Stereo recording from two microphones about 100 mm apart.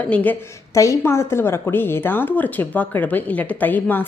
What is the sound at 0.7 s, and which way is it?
A woman's voice, 30° left (ahead or behind).